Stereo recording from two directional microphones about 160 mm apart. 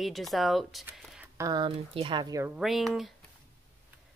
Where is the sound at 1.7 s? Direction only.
35° right (ahead or behind).